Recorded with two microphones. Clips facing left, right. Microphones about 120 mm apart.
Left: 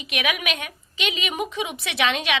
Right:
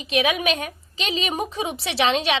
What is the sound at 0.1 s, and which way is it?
A woman's voice, 30° right (ahead or behind).